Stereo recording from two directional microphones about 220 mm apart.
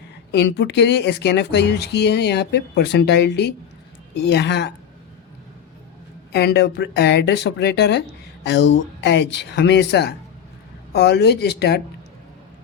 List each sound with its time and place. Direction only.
0.3 s speech: 50° left (ahead or behind)
6.3 s speech: 50° left (ahead or behind)